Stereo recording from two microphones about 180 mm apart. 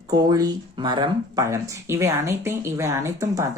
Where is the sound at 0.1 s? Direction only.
20° right (ahead or behind).